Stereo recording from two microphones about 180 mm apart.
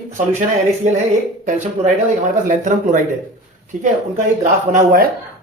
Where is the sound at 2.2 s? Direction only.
45° right (ahead or behind).